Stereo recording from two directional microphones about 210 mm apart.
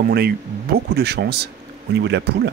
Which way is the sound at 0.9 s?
50° right (ahead or behind).